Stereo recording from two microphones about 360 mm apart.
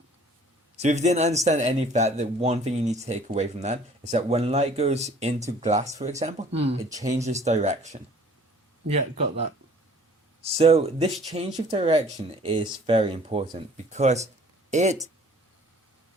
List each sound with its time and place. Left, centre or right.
0.8 s speech: centre
8.9 s speech: centre